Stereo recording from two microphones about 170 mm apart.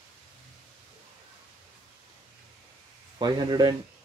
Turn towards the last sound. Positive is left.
turn(degrees=-25)  # may be behind; listen again after turning